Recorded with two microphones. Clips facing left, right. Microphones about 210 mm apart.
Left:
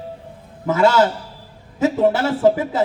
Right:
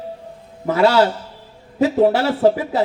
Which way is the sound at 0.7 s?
50° left (ahead or behind).